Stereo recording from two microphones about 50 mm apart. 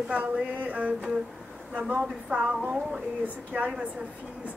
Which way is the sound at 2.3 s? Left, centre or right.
Right.